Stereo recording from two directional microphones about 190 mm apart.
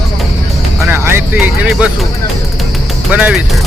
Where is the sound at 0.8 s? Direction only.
10° right (ahead or behind).